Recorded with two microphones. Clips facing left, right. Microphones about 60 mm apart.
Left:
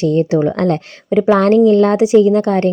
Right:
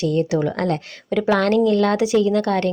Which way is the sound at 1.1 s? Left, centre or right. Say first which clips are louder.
Left 7 dB; left.